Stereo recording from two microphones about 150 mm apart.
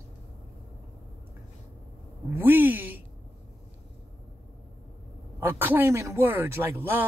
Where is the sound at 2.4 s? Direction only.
15° right (ahead or behind).